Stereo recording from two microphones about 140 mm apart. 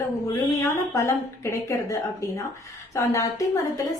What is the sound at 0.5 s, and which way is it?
A woman's voice, 20° left (ahead or behind).